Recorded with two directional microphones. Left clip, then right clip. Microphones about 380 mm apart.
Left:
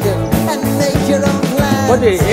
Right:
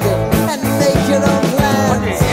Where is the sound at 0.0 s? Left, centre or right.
Centre.